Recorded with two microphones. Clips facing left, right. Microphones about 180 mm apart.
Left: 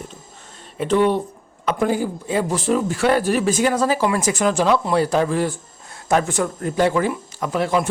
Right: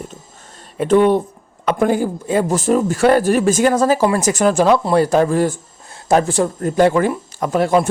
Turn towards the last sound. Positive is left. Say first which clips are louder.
# right 5 dB
turn(degrees=-45)  # may be behind; listen again after turning